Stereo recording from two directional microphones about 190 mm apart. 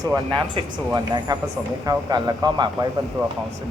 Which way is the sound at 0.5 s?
20° right (ahead or behind).